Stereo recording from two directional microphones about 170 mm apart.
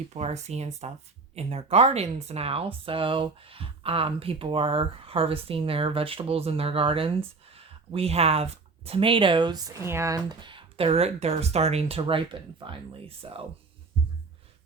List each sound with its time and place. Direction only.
0.1 s speech: 40° right (ahead or behind)